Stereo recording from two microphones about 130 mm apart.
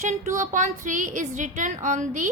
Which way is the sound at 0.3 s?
75° right (ahead or behind).